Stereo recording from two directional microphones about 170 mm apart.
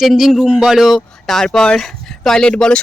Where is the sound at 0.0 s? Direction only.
Centre (ahead or behind).